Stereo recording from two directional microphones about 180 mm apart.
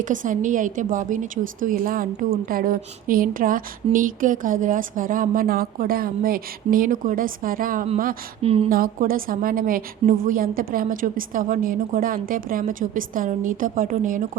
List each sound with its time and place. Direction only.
0.0 s a woman's voice: 45° right (ahead or behind)
8.4 s speech: 35° right (ahead or behind)
8.7 s a woman's voice: 50° right (ahead or behind)